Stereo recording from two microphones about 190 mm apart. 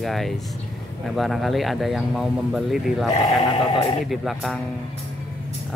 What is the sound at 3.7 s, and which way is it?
Speech, 30° left (ahead or behind).